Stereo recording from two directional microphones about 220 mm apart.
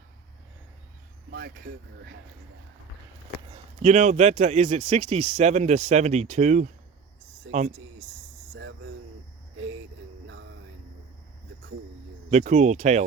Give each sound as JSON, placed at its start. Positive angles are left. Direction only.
{"t": 1.3, "sound": "speech", "side_deg": -45}
{"t": 3.3, "sound": "speech", "side_deg": -30}
{"t": 8.5, "sound": "a sound", "side_deg": -55}
{"t": 12.3, "sound": "speech", "side_deg": -35}